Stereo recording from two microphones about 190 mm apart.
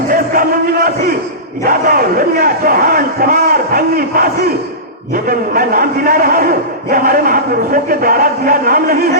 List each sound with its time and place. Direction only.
1.6 s a man's voice: 50° right (ahead or behind)